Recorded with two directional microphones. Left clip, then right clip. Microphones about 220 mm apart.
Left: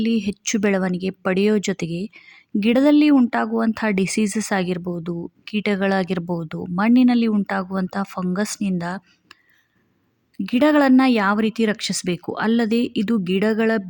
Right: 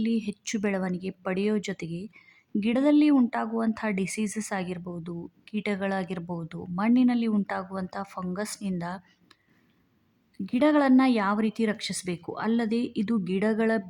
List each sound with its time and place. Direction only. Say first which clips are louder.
0.0 s speech: left 7 dB; 20° left (ahead or behind)